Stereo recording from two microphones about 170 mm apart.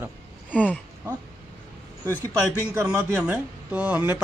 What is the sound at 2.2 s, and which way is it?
Speech, 15° right (ahead or behind).